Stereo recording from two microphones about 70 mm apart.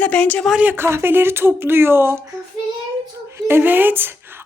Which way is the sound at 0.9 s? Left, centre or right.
Right.